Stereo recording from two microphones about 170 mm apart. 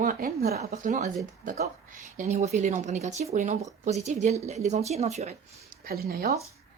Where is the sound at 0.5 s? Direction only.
40° right (ahead or behind).